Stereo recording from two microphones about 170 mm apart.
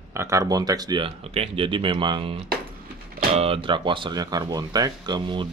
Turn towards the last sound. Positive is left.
turn(degrees=-25)  # may be behind; listen again after turning